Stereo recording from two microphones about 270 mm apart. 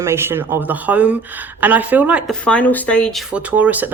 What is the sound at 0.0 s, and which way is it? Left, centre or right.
Speech, centre.